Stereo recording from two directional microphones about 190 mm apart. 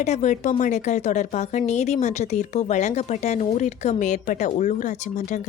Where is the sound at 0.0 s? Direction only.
40° left (ahead or behind).